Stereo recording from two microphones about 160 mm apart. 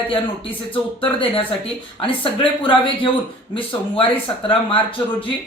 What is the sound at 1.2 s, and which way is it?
Speech, 35° left (ahead or behind).